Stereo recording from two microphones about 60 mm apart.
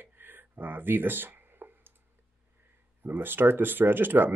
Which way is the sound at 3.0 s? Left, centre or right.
Right.